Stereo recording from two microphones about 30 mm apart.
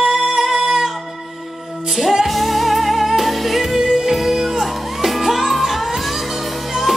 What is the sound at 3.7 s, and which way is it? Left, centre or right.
Music, centre.